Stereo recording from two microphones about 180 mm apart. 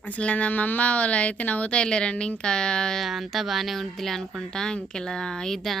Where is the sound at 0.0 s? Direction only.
10° left (ahead or behind).